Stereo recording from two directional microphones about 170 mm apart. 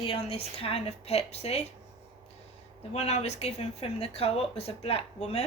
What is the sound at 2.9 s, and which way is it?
Speech, 40° left (ahead or behind).